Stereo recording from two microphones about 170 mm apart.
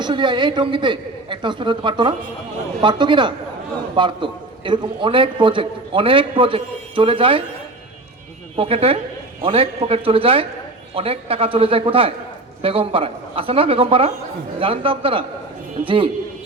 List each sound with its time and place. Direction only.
0.0 s a man's voice: 25° right (ahead or behind)
8.5 s a man's voice: 35° right (ahead or behind)